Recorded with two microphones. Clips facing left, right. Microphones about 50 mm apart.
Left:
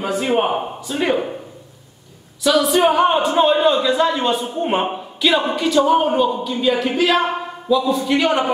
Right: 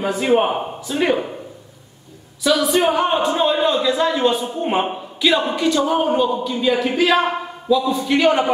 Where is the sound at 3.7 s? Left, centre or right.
Centre.